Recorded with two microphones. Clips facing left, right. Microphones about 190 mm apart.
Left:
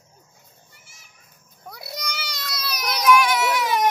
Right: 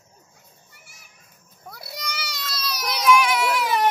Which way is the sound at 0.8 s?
65° right (ahead or behind).